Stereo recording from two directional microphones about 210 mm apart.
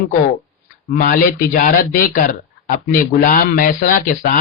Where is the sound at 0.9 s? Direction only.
40° left (ahead or behind).